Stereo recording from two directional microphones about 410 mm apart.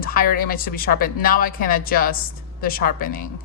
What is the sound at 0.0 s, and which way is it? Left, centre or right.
A woman's voice, left.